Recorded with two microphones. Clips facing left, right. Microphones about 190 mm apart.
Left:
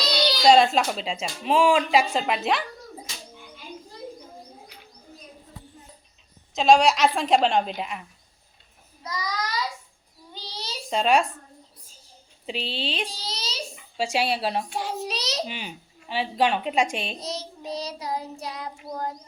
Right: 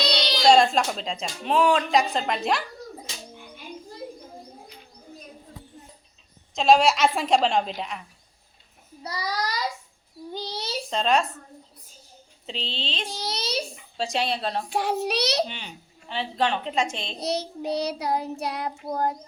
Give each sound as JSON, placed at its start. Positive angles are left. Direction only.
{"t": 0.4, "sound": "speech", "side_deg": 5}
{"t": 6.5, "sound": "speech", "side_deg": 0}
{"t": 9.0, "sound": "a child's voice", "side_deg": -30}
{"t": 10.3, "sound": "a sound", "side_deg": -55}
{"t": 10.8, "sound": "speech", "side_deg": 10}
{"t": 12.5, "sound": "a woman's voice", "side_deg": 10}
{"t": 13.1, "sound": "a sound", "side_deg": -60}
{"t": 13.9, "sound": "a woman's voice", "side_deg": 10}
{"t": 14.7, "sound": "child singing", "side_deg": -65}
{"t": 15.4, "sound": "a woman's voice", "side_deg": 10}
{"t": 17.2, "sound": "child singing", "side_deg": -65}